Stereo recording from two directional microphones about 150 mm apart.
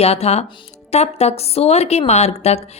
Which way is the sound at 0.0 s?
45° left (ahead or behind).